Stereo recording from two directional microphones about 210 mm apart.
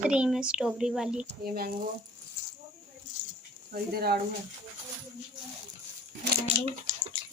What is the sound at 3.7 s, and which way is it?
Speech, 45° right (ahead or behind).